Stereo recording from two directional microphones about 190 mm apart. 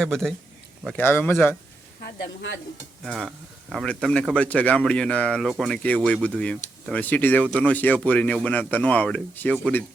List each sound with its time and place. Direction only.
0.0 s speech: 5° left (ahead or behind)
2.1 s speech: 70° left (ahead or behind)
3.0 s speech: 5° left (ahead or behind)